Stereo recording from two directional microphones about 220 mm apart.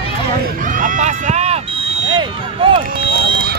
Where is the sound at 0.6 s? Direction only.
35° right (ahead or behind).